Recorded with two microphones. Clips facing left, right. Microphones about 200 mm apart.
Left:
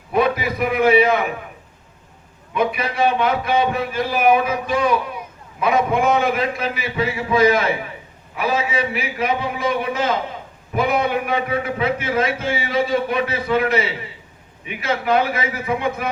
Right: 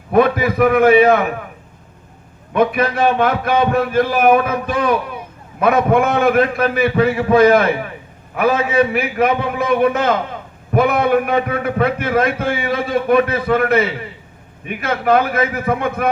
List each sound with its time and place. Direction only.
0.1 s a man's voice: 55° right (ahead or behind)
2.5 s a man's voice: 55° right (ahead or behind)